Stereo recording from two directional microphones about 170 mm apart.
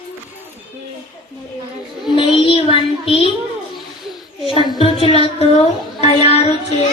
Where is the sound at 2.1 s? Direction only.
30° left (ahead or behind).